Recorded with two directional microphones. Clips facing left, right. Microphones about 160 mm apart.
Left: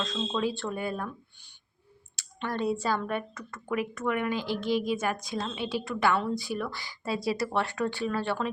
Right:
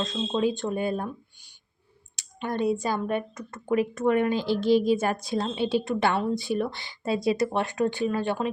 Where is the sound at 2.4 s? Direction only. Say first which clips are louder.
Right 3 dB; 15° right (ahead or behind).